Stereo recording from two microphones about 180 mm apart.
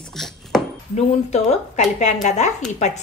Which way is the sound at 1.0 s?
40° left (ahead or behind).